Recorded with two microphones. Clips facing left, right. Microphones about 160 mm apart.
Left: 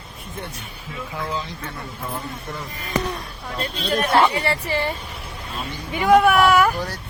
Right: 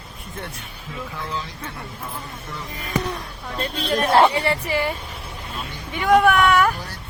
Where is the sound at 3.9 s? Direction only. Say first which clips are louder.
Right 2 dB; 30° right (ahead or behind).